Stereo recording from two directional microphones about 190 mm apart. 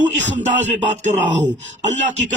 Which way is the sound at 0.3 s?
40° right (ahead or behind).